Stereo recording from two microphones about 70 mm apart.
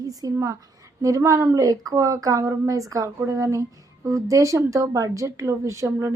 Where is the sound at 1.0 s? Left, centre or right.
Right.